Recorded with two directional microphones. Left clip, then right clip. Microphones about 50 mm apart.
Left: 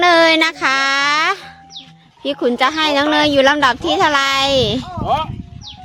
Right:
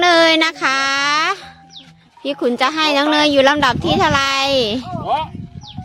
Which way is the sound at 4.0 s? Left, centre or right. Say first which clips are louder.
Left 2 dB; centre.